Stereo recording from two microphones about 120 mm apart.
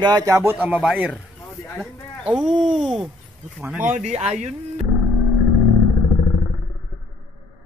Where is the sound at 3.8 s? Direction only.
80° right.